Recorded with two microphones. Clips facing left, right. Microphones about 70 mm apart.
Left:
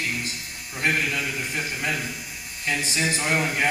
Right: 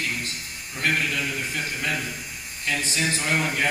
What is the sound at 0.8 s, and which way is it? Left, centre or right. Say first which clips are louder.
A man's voice: even; left.